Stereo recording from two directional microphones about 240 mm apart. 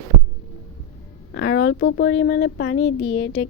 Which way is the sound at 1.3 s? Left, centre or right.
Left.